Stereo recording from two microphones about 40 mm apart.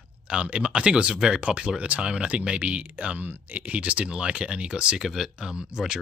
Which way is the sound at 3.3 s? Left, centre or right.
Right.